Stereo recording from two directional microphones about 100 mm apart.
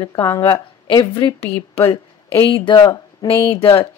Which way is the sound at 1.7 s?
25° left (ahead or behind).